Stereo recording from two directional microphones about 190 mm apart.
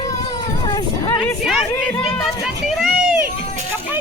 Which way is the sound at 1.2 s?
5° left (ahead or behind).